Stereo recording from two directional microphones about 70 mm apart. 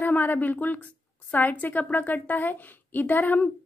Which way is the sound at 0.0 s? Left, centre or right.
Left.